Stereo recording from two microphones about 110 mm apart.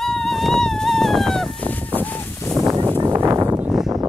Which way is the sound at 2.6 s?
35° right (ahead or behind).